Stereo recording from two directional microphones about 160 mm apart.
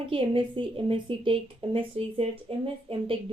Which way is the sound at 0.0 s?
30° right (ahead or behind).